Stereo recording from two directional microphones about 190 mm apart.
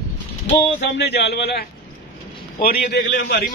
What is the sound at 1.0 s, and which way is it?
A man's voice, 60° left (ahead or behind).